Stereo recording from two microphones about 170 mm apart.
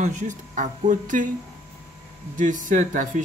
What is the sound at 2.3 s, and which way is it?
Speech, 50° right (ahead or behind).